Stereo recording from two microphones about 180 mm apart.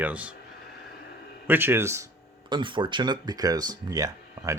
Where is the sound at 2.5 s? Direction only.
25° right (ahead or behind).